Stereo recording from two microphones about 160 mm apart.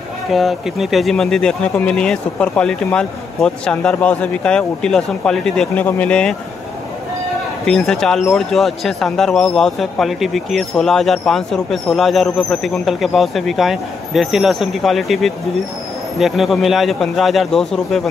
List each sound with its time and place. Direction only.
0.3 s speech: centre (ahead or behind)
7.6 s speech: 5° left (ahead or behind)